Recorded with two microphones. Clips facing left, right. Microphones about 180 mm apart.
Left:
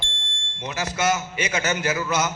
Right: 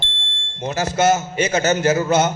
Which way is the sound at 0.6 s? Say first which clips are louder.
Right 7 dB; 45° right (ahead or behind).